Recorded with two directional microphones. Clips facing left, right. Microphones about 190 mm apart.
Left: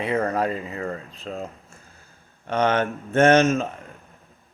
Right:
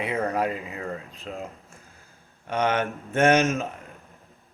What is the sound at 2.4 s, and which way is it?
Speech, 10° right (ahead or behind).